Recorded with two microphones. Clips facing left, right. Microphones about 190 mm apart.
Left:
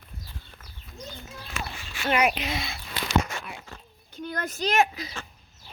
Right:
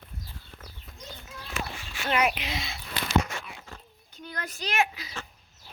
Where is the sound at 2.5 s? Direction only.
55° left (ahead or behind).